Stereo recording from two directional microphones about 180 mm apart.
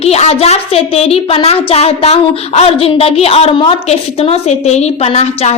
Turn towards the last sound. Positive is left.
turn(degrees=35)  # may be behind; listen again after turning